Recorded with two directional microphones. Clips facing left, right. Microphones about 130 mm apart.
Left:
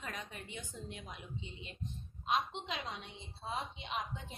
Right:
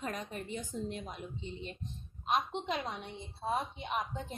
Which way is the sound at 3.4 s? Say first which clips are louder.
Right 6 dB; 50° right (ahead or behind).